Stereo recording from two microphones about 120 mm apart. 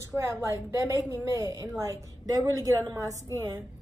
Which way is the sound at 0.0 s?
20° right (ahead or behind).